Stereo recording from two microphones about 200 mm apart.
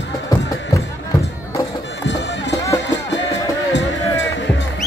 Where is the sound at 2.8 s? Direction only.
65° left (ahead or behind).